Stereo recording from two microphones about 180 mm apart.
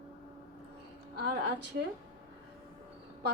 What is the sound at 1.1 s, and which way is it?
Speech, 60° right (ahead or behind).